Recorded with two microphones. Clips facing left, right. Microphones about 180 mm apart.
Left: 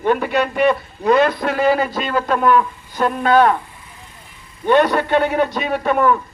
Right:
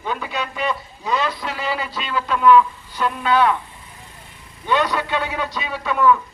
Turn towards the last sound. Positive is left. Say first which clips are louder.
# left 2 dB
turn(degrees=50)  # may be behind; listen again after turning